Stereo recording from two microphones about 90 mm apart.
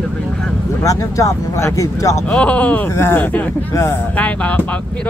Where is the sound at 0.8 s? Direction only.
40° left (ahead or behind).